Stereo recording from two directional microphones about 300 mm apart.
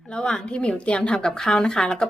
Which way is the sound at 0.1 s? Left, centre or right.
Centre.